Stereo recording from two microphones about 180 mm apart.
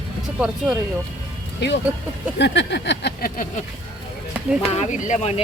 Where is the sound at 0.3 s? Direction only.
5° right (ahead or behind).